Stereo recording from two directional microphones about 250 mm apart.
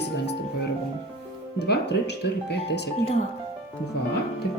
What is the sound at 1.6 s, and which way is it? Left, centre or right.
Music, left.